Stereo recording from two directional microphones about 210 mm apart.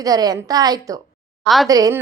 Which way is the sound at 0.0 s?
20° right (ahead or behind).